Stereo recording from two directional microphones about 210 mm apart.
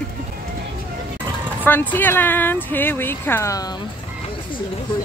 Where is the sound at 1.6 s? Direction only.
10° left (ahead or behind).